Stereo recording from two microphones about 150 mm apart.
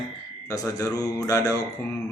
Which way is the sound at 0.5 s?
25° left (ahead or behind).